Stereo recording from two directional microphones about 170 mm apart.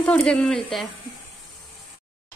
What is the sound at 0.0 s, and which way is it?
Speech, 5° left (ahead or behind).